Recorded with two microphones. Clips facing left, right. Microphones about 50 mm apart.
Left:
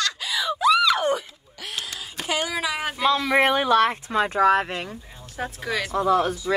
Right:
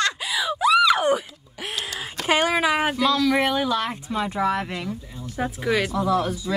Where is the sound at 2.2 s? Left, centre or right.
Right.